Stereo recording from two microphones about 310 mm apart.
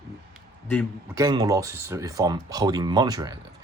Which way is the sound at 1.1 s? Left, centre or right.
Centre.